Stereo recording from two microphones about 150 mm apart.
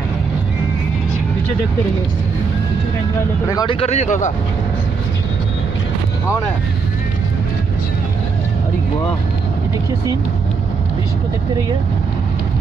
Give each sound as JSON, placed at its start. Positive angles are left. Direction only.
{"t": 3.4, "sound": "speech", "side_deg": 25}
{"t": 3.8, "sound": "speech", "side_deg": 45}